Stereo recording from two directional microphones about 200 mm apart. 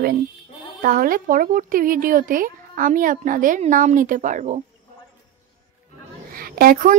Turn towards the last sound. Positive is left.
turn(degrees=-45)  # may be behind; listen again after turning